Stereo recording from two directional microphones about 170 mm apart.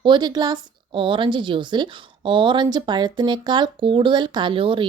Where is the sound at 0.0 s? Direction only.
25° right (ahead or behind).